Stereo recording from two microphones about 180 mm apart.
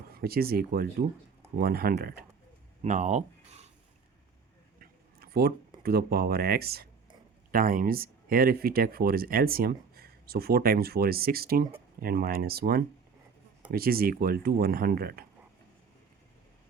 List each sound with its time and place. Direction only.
0.2 s speech: 55° right (ahead or behind)
2.8 s speech: 40° right (ahead or behind)
4.8 s a sound: 60° right (ahead or behind)
5.8 s speech: 60° right (ahead or behind)
7.5 s speech: 50° right (ahead or behind)